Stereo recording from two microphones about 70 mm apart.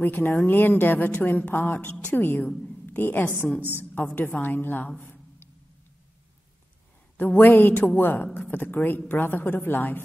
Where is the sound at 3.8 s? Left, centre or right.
Left.